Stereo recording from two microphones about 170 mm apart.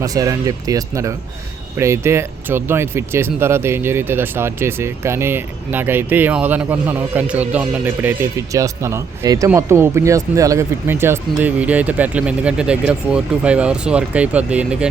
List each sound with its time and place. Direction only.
0.0 s speech: 20° right (ahead or behind)